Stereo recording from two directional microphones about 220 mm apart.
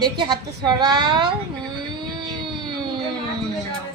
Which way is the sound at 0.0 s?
20° right (ahead or behind).